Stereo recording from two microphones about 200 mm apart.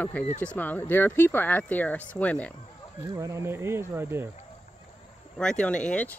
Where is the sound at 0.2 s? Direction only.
10° left (ahead or behind).